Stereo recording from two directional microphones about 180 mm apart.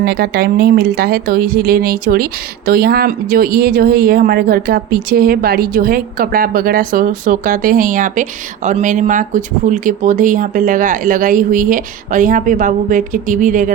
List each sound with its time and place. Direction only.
0.0 s speech: 60° right (ahead or behind); by 13.7 s 45° right (ahead or behind)